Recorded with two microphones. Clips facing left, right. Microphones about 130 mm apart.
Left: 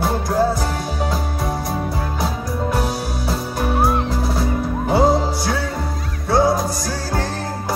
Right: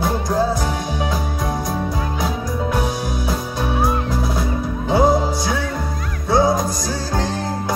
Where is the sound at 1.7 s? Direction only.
5° left (ahead or behind).